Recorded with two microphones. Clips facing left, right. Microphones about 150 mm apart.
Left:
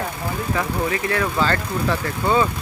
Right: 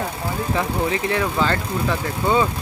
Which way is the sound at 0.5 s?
20° right (ahead or behind).